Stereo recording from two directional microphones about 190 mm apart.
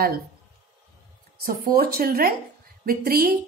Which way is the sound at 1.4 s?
50° right (ahead or behind).